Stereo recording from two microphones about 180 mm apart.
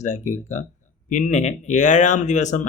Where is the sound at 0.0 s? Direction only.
40° left (ahead or behind).